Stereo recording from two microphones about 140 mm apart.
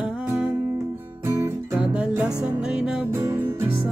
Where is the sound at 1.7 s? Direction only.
5° right (ahead or behind).